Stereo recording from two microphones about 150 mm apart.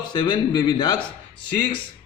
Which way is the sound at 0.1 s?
30° left (ahead or behind).